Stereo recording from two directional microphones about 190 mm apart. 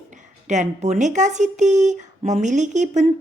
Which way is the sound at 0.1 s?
40° right (ahead or behind).